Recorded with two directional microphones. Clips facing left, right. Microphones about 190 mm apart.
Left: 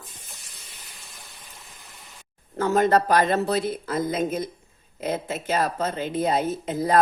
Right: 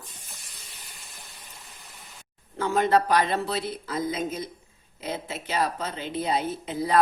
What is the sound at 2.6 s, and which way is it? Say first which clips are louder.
Speech: left 3 dB; 45° left (ahead or behind).